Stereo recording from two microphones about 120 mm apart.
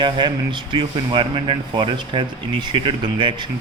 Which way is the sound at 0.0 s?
40° right (ahead or behind).